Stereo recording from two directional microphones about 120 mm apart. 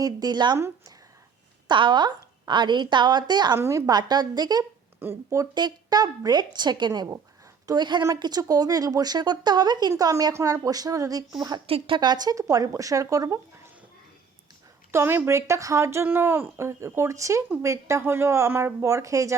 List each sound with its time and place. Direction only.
0.0 s speech: 35° right (ahead or behind)
0.5 s speech: 25° right (ahead or behind)
1.6 s speech: 40° right (ahead or behind)
3.6 s speech: 25° right (ahead or behind)
4.9 s speech: 20° right (ahead or behind)
11.6 s speech: 50° right (ahead or behind)
11.9 s speech: 35° right (ahead or behind)
14.9 s speech: 20° right (ahead or behind)